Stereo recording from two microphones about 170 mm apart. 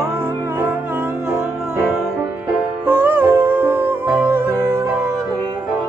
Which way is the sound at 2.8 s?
10° right (ahead or behind).